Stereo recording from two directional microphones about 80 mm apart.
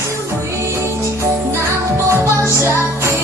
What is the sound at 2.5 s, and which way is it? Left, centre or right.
Music, right.